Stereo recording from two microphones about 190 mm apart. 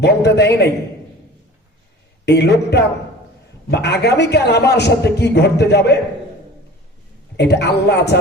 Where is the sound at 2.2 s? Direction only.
60° left (ahead or behind).